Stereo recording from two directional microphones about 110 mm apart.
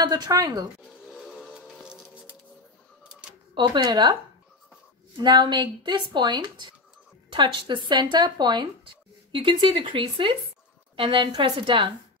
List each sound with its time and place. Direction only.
0.0 s speech: 35° right (ahead or behind)
1.3 s music: centre (ahead or behind)
3.0 s a sound: 10° right (ahead or behind)
3.5 s speech: 40° right (ahead or behind)